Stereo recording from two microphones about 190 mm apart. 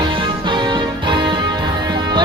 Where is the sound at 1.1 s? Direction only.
25° right (ahead or behind).